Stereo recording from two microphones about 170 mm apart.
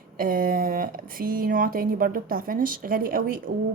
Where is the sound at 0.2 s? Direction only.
55° right (ahead or behind).